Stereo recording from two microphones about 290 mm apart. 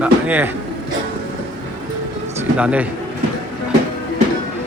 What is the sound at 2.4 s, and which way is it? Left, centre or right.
Speech, centre.